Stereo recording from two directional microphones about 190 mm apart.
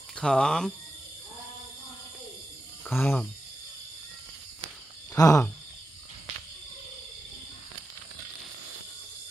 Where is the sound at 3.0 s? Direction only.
10° left (ahead or behind).